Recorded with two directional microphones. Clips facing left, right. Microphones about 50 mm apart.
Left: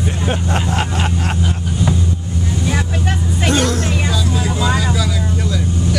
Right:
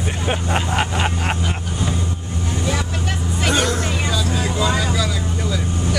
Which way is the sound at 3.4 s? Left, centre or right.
Centre.